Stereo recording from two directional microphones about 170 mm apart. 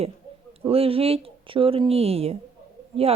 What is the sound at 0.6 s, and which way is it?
Speech, 35° right (ahead or behind).